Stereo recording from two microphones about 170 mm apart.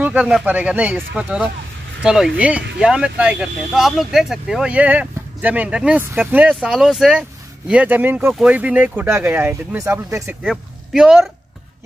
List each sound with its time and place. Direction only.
0.0 s speech: 5° right (ahead or behind)
10.4 s speech: centre (ahead or behind)